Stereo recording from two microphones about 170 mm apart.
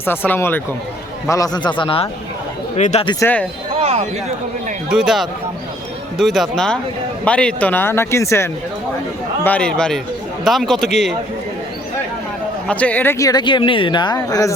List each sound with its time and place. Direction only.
0.0 s speech: 10° left (ahead or behind); by 3.1 s 40° left (ahead or behind)
3.8 s a sound: 40° right (ahead or behind)
4.9 s speech: centre (ahead or behind)
12.6 s speech: 10° left (ahead or behind)